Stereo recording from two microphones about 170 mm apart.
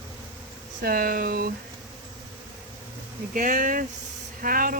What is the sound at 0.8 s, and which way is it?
Speech, 60° right (ahead or behind).